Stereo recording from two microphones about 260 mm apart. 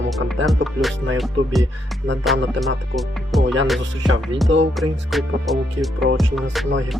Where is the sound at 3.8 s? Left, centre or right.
Right.